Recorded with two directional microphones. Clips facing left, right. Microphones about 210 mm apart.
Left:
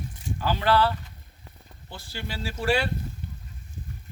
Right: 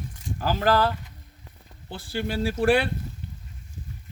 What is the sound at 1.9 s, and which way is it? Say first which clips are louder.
Speech: right 8 dB; 55° right (ahead or behind).